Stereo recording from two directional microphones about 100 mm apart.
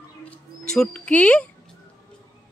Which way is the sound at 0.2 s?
10° left (ahead or behind).